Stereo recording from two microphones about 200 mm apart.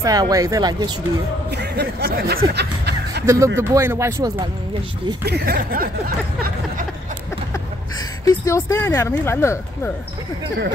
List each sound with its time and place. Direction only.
0.0 s speech: 15° right (ahead or behind)
1.5 s speech: 55° right (ahead or behind)
3.3 s speech: 15° right (ahead or behind)
5.2 s a sound: 55° right (ahead or behind)
8.3 s speech: 15° left (ahead or behind)